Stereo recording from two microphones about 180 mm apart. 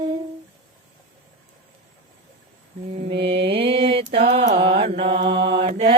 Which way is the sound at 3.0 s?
35° right (ahead or behind).